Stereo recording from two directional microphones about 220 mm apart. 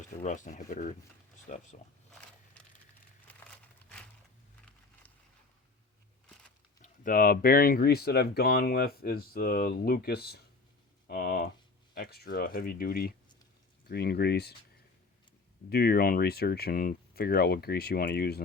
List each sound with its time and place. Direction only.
0.2 s speech: 35° left (ahead or behind)
3.4 s crumpling: 5° left (ahead or behind)
6.8 s speech: 40° left (ahead or behind)
15.7 s speech: 45° left (ahead or behind)